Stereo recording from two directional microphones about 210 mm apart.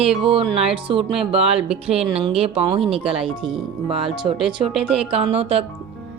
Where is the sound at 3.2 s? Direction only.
Centre (ahead or behind).